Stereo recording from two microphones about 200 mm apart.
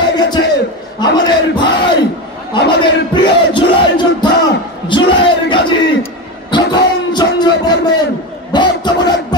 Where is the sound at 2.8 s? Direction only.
25° left (ahead or behind).